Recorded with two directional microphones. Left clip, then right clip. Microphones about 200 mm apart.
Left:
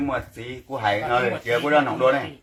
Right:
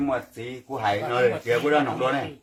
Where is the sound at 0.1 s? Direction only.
15° right (ahead or behind).